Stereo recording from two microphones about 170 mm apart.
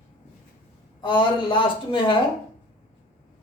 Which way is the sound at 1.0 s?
30° left (ahead or behind).